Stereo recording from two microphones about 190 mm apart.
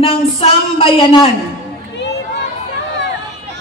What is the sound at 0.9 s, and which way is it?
Speech, 30° left (ahead or behind).